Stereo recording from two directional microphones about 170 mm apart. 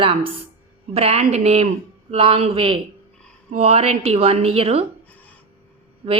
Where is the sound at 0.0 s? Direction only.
35° right (ahead or behind).